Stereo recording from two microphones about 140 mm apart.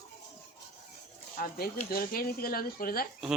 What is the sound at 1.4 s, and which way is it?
Speech, 90° left.